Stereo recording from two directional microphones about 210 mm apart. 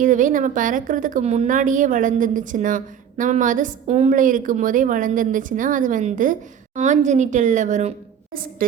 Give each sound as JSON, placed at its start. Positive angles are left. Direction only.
{"t": 0.0, "sound": "a woman's voice", "side_deg": -40}